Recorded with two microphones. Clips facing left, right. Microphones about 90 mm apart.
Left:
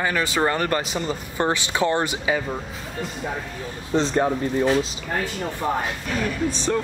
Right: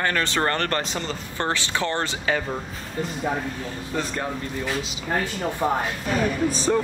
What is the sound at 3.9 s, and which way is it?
Speech, 25° left (ahead or behind).